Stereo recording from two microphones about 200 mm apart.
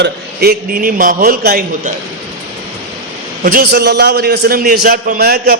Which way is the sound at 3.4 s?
50° right (ahead or behind).